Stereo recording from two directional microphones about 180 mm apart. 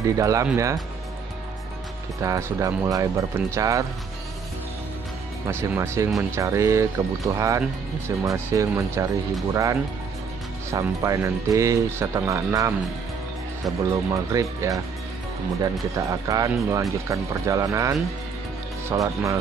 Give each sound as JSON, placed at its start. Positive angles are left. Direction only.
{"t": 0.0, "sound": "speech", "side_deg": -20}
{"t": 2.2, "sound": "speech", "side_deg": -20}
{"t": 5.5, "sound": "speech", "side_deg": -15}
{"t": 13.8, "sound": "speech", "side_deg": -15}